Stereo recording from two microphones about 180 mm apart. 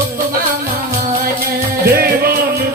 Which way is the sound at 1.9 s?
60° right (ahead or behind).